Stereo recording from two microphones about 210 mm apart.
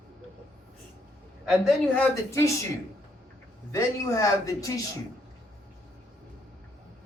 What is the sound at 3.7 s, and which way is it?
Speech, 15° left (ahead or behind).